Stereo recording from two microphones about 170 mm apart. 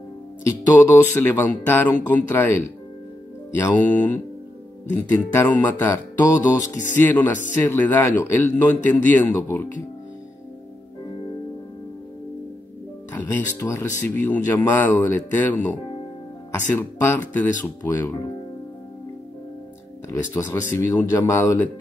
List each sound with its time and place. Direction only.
0.5 s speech: 15° left (ahead or behind)
4.9 s speech: 10° left (ahead or behind)
13.1 s speech: 10° left (ahead or behind)
20.1 s speech: 15° left (ahead or behind)